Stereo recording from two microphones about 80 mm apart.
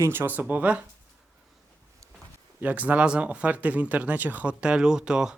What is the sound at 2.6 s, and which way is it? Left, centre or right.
Speech, centre.